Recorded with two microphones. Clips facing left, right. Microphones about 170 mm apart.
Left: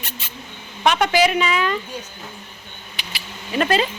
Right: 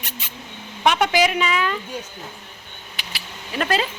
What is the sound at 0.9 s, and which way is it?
Speech, 10° right (ahead or behind).